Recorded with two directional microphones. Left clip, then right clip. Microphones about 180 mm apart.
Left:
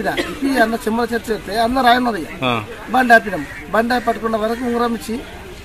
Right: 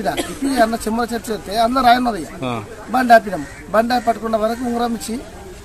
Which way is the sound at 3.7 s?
25° right (ahead or behind).